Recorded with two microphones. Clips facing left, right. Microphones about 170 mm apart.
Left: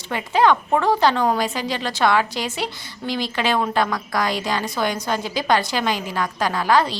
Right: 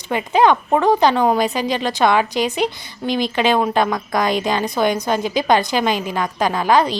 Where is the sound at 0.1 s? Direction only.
20° right (ahead or behind).